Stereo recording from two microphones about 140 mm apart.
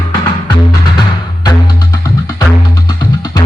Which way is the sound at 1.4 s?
30° left (ahead or behind).